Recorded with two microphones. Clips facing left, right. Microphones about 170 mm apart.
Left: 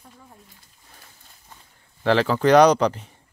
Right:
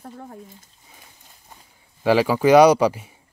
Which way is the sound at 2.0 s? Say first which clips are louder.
Right 2 dB; 10° right (ahead or behind).